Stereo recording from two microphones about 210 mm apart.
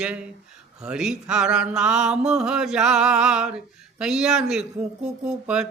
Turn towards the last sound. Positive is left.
turn(degrees=-5)  # may be behind; listen again after turning